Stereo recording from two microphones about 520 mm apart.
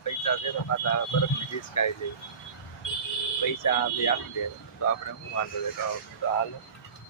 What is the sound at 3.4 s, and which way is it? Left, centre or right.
Speech, left.